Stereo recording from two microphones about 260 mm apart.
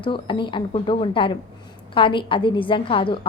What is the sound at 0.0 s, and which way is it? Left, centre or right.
A woman's voice, centre.